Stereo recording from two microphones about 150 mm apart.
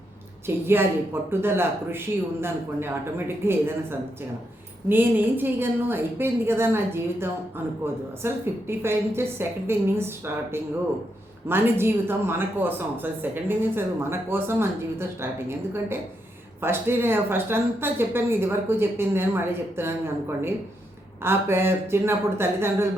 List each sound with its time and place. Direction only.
0.4 s speech: 15° right (ahead or behind)